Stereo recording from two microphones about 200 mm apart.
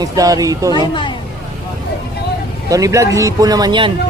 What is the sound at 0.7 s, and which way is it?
Speech, 20° left (ahead or behind).